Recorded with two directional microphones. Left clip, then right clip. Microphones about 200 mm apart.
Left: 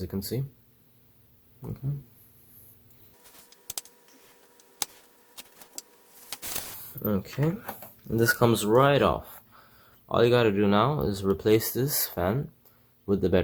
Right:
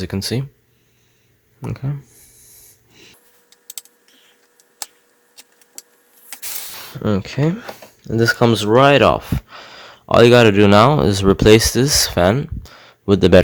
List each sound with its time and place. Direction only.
0.0 s speech: 50° right (ahead or behind)
1.6 s speech: 50° right (ahead or behind)
3.5 s a sound: centre (ahead or behind)
6.9 s speech: 40° right (ahead or behind)